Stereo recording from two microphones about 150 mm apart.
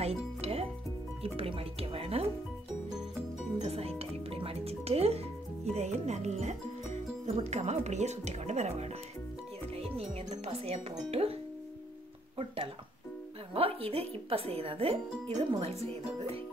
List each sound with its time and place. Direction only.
0.0 s music: 45° right (ahead or behind)
1.2 s speech: 40° right (ahead or behind)
3.5 s music: 45° right (ahead or behind)
5.7 s speech: 50° right (ahead or behind)
13.5 s speech: 40° right (ahead or behind)